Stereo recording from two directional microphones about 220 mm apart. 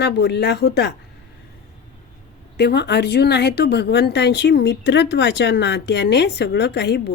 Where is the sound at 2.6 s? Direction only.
50° left (ahead or behind).